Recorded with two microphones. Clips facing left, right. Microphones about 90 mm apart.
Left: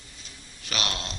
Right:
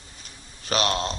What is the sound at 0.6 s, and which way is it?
Speech, 35° right (ahead or behind).